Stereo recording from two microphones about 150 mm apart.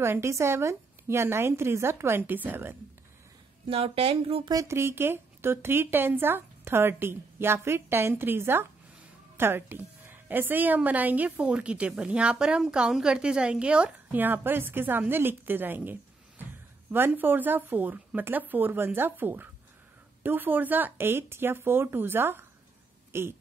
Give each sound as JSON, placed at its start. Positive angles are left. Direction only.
{"t": 0.0, "sound": "a woman's voice", "side_deg": -20}
{"t": 3.6, "sound": "speech", "side_deg": -40}
{"t": 4.5, "sound": "a woman's voice", "side_deg": -20}